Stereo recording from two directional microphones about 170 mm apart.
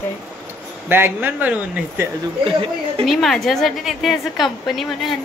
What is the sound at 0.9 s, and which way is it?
Speech, 10° right (ahead or behind).